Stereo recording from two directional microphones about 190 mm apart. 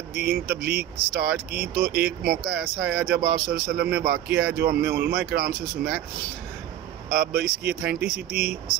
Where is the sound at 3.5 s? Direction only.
55° right (ahead or behind).